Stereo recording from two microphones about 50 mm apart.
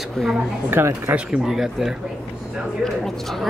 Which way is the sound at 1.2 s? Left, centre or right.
Centre.